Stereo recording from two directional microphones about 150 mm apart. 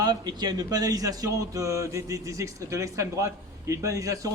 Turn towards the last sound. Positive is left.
turn(degrees=-20)  # may be behind; listen again after turning